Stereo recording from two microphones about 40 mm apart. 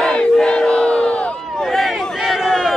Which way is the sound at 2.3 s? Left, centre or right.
Centre.